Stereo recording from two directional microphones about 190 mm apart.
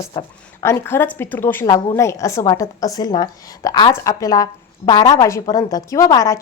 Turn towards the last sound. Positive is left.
turn(degrees=15)  # may be behind; listen again after turning